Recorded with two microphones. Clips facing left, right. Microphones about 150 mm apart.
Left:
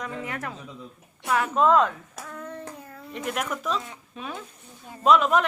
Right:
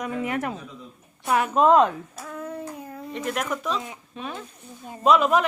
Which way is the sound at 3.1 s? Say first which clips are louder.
Right 2 dB; centre (ahead or behind).